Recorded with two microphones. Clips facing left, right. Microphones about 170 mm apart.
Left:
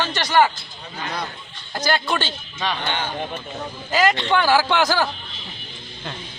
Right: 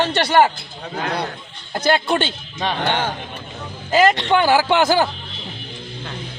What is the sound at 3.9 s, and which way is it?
Speech, 25° right (ahead or behind).